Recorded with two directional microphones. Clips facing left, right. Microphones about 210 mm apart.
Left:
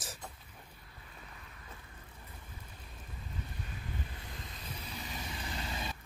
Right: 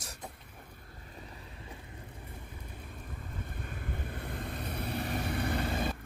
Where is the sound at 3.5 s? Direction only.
50° right (ahead or behind).